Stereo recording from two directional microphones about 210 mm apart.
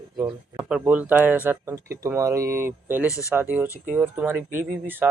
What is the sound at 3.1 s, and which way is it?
Speech, 15° left (ahead or behind).